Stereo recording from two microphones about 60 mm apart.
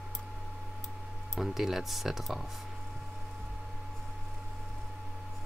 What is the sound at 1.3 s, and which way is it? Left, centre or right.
Speech, centre.